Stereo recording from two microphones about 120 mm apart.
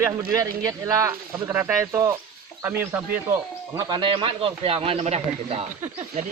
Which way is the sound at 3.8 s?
40° right (ahead or behind).